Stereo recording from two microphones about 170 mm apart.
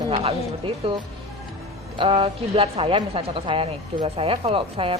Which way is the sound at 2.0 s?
30° right (ahead or behind).